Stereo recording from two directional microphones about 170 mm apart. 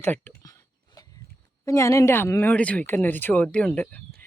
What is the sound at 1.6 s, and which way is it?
Speech, 15° left (ahead or behind).